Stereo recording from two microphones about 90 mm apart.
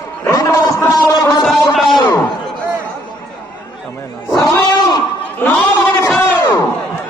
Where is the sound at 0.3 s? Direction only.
40° left (ahead or behind).